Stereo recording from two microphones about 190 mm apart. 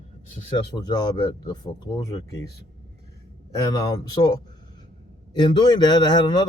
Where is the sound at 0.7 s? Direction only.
20° left (ahead or behind).